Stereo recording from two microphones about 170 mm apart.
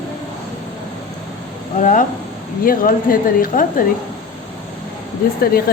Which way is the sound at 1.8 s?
50° left (ahead or behind).